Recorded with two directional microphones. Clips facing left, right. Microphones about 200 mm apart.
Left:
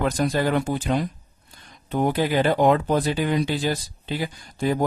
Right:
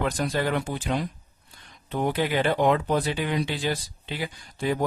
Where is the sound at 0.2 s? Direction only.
40° left (ahead or behind).